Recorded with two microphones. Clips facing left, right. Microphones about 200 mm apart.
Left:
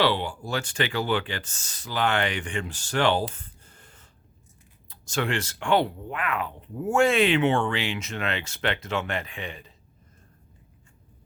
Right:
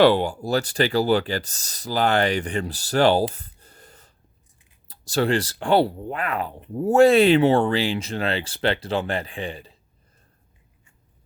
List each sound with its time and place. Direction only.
0.0 s speech: 45° right (ahead or behind)